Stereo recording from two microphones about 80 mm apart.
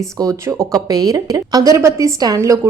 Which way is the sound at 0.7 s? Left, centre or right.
Right.